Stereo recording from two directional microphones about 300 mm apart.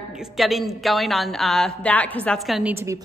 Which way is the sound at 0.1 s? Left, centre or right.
Centre.